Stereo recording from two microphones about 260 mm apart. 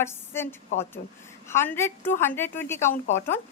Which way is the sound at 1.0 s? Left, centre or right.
Left.